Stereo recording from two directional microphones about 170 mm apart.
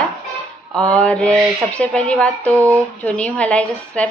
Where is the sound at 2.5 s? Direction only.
20° right (ahead or behind).